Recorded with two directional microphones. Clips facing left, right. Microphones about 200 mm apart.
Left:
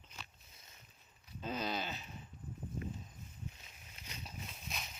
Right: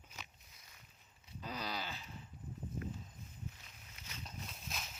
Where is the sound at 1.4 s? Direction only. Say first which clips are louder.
Left 4 dB; 25° left (ahead or behind).